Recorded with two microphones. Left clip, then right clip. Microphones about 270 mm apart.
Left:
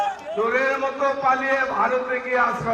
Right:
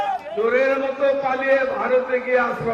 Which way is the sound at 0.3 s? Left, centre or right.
Centre.